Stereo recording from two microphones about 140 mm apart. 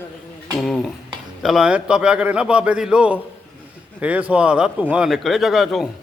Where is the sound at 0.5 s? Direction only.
5° left (ahead or behind).